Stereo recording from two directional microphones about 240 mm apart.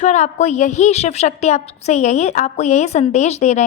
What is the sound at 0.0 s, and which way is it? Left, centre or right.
A woman's voice, left.